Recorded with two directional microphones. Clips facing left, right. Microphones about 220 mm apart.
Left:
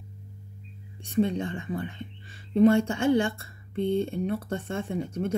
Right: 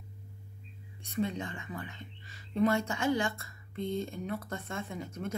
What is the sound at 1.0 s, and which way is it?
Speech, 30° left (ahead or behind).